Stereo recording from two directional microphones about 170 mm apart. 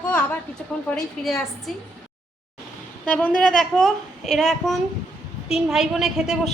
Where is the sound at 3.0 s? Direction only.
5° left (ahead or behind).